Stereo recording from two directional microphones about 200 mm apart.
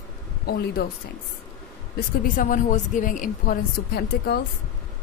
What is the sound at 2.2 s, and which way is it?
A woman's voice, 40° left (ahead or behind).